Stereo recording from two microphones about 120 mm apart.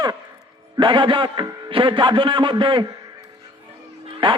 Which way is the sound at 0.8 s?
40° right (ahead or behind).